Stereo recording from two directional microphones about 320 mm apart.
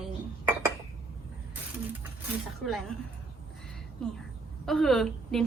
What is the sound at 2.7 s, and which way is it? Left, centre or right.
Speech, centre.